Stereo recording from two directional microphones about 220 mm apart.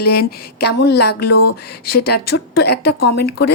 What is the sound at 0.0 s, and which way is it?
A woman's voice, 45° left (ahead or behind).